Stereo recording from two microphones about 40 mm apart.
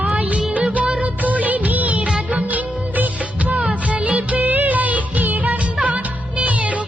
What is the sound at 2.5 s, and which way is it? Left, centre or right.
Music of bollywood, right.